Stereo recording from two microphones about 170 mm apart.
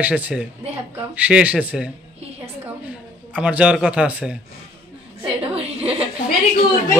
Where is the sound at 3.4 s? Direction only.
5° right (ahead or behind).